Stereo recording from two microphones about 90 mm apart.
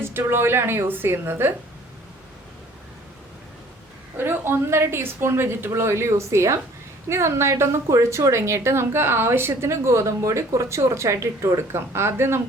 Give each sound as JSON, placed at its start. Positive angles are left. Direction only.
{"t": 0.0, "sound": "speech", "side_deg": -25}
{"t": 4.2, "sound": "a woman's voice", "side_deg": -25}